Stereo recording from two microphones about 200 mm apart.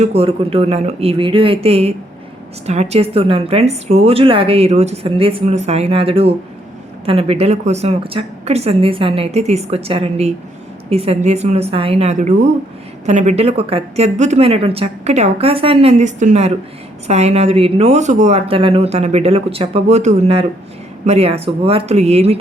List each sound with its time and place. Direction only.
0.0 s a woman's voice: 30° right (ahead or behind)